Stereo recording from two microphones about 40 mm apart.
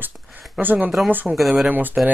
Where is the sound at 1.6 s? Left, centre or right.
Right.